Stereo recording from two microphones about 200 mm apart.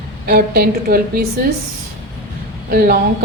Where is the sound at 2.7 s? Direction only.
50° right (ahead or behind).